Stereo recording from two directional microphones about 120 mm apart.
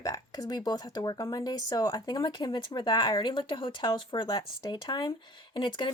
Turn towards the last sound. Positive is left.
turn(degrees=45)  # may be behind; listen again after turning